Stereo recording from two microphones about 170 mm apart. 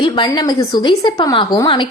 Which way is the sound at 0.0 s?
25° left (ahead or behind).